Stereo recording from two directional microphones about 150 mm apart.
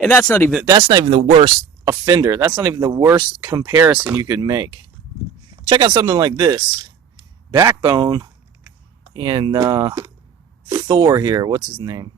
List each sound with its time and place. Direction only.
0.0 s speech: 15° left (ahead or behind)
1.0 s speech: 40° right (ahead or behind)
1.9 s speech: 25° right (ahead or behind)
5.6 s speech: 35° right (ahead or behind)